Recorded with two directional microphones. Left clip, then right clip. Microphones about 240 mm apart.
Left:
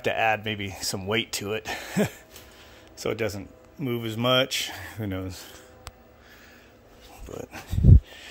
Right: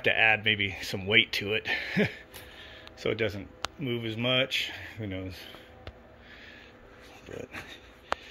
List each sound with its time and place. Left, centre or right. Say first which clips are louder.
0.0 s speech: right 1 dB; centre
7.2 s dog: left 2 dB; centre